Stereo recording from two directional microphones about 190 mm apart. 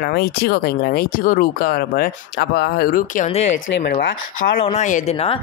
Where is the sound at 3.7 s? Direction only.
55° left (ahead or behind).